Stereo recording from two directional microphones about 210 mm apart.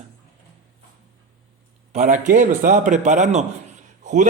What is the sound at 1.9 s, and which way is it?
Speech, 35° right (ahead or behind).